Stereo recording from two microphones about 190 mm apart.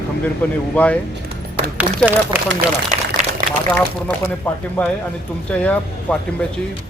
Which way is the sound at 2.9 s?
35° right (ahead or behind).